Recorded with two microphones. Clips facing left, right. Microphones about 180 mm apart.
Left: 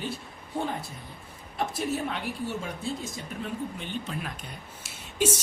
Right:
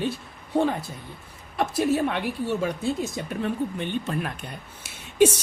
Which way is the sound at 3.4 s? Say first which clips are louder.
Right 7 dB; 60° right (ahead or behind).